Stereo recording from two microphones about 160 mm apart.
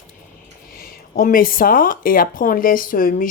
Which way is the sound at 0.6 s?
65° left (ahead or behind).